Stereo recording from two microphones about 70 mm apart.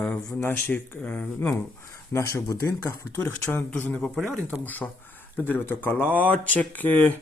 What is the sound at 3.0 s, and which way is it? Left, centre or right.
Speech, left.